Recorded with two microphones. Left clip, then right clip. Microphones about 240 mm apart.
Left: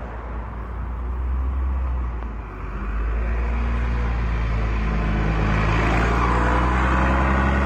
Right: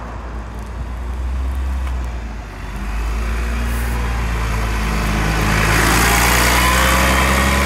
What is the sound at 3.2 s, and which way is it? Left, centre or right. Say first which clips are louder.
Vehicle: right 5 dB; right.